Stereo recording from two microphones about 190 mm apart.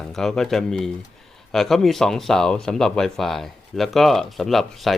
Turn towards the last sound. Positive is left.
turn(degrees=0)  # may be behind; listen again after turning